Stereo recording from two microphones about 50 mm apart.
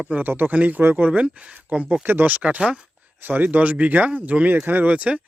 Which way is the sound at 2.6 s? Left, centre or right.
Centre.